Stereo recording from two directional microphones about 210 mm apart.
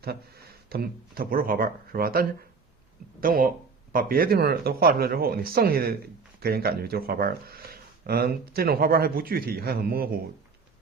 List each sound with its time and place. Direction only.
0.0 s speech: 45° right (ahead or behind)